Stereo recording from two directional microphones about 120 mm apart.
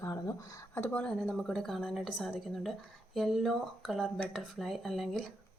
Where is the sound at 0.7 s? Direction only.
15° left (ahead or behind).